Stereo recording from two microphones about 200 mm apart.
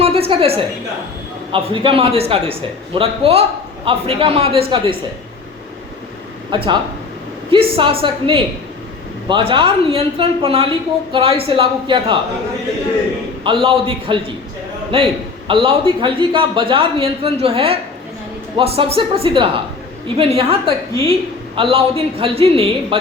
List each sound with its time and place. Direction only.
0.0 s a sound: 30° right (ahead or behind)
1.5 s a man's voice: 25° right (ahead or behind)
6.5 s a man's voice: 25° right (ahead or behind)
13.4 s a man's voice: 25° right (ahead or behind)